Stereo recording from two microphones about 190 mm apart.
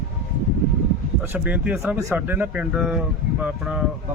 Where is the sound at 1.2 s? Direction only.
10° right (ahead or behind).